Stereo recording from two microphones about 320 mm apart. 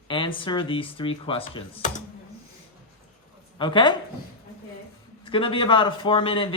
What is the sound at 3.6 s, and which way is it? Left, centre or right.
Speech, centre.